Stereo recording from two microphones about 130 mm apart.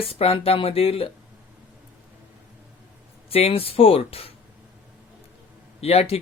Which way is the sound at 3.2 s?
50° left (ahead or behind).